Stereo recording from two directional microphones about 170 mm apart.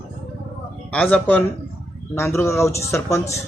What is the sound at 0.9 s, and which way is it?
Speech, 5° left (ahead or behind).